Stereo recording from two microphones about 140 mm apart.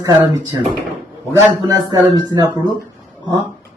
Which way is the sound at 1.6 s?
30° right (ahead or behind).